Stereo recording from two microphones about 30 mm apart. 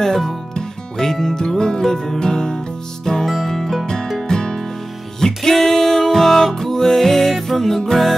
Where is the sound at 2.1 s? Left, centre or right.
Left.